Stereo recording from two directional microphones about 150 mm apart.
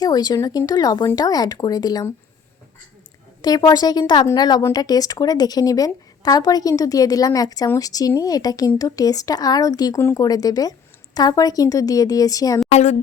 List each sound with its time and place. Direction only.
0.0 s a woman's voice: 25° left (ahead or behind)
3.4 s a woman's voice: 25° left (ahead or behind)
12.7 s speech: 50° left (ahead or behind)